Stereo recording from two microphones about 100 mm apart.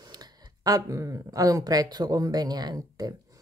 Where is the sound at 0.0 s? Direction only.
40° right (ahead or behind).